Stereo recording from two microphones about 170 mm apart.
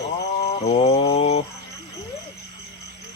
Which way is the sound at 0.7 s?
35° left (ahead or behind).